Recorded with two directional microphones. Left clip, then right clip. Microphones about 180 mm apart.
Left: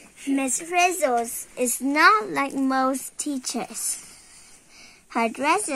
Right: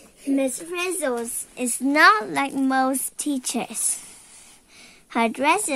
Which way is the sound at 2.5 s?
65° right (ahead or behind).